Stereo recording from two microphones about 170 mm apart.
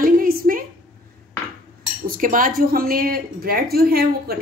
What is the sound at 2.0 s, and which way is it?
A woman's voice, 55° right (ahead or behind).